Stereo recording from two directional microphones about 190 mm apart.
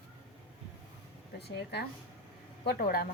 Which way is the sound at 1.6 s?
60° left (ahead or behind).